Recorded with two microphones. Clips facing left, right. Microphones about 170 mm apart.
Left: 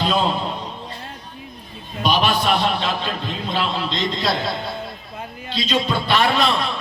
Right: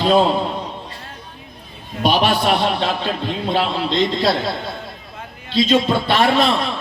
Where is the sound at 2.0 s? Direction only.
60° right (ahead or behind).